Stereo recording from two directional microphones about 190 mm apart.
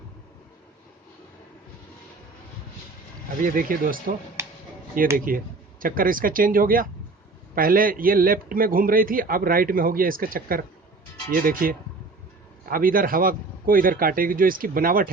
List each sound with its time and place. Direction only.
3.4 s a man's voice: 45° right (ahead or behind)
4.4 s a sound: 15° right (ahead or behind)
5.1 s a man's voice: 45° right (ahead or behind)